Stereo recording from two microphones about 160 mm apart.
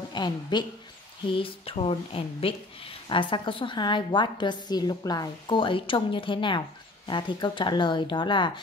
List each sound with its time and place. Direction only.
0.1 s a woman's voice: 30° left (ahead or behind)